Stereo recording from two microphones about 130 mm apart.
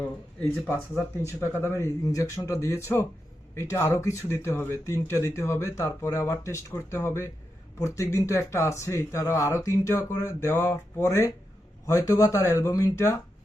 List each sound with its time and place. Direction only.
1.2 s speech: 15° left (ahead or behind)